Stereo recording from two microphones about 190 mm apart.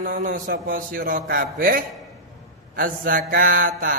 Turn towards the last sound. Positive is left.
turn(degrees=-45)  # may be behind; listen again after turning